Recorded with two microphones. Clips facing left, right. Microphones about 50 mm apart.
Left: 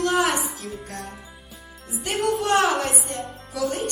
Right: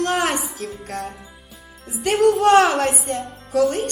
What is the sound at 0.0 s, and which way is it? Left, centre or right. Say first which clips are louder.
Music: right 1 dB; right.